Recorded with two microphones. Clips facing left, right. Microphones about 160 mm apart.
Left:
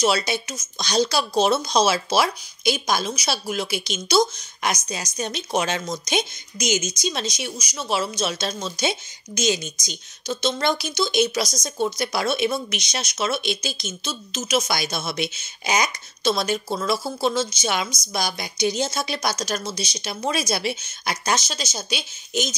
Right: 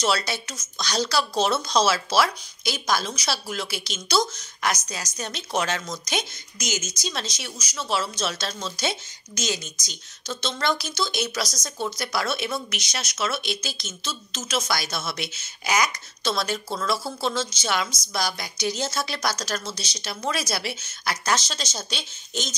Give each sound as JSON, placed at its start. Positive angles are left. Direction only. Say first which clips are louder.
{"t": 0.0, "sound": "speech", "louder": "left 3 dB", "side_deg": 15}